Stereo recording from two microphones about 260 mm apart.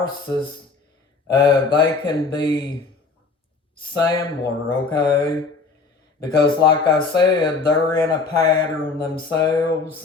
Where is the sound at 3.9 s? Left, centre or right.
Centre.